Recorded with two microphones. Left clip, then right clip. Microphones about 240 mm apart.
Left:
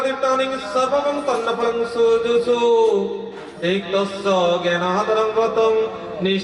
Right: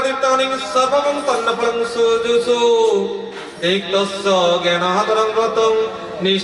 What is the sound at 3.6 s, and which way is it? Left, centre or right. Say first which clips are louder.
Speech: right 3 dB; centre.